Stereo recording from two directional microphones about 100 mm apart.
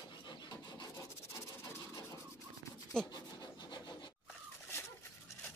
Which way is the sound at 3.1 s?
45° left (ahead or behind).